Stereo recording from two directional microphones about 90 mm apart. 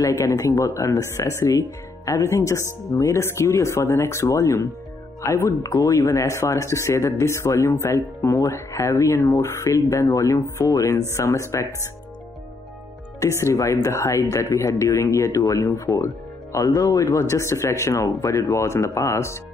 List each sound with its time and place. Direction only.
0.0 s speech: 35° left (ahead or behind)
13.2 s speech: 35° left (ahead or behind)